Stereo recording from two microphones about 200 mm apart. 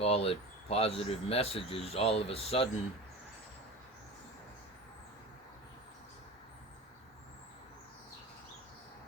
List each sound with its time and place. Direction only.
0.0 s speech: 30° left (ahead or behind)